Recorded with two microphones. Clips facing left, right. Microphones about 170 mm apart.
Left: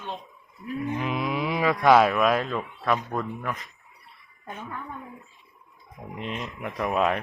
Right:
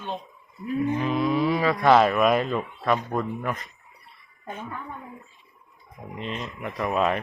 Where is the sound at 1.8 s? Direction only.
5° left (ahead or behind).